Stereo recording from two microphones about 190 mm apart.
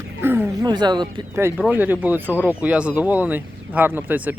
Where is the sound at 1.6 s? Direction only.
10° right (ahead or behind).